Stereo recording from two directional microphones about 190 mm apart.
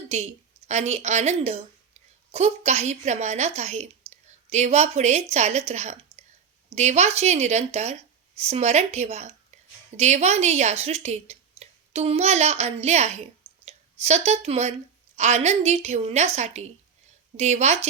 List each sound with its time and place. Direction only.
0.7 s a woman's voice: 35° right (ahead or behind)